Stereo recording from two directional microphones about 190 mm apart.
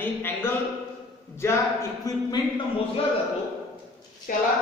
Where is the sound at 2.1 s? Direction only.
20° left (ahead or behind).